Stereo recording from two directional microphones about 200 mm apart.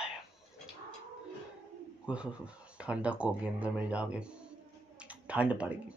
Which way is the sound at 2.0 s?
5° right (ahead or behind).